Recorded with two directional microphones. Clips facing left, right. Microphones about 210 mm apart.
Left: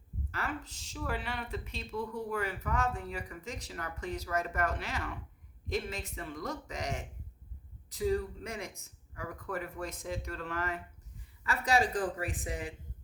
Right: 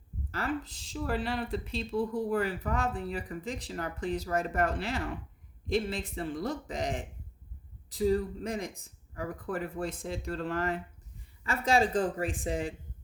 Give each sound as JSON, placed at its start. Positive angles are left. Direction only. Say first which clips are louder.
{"t": 0.3, "sound": "speech", "louder": "right 5 dB", "side_deg": -35}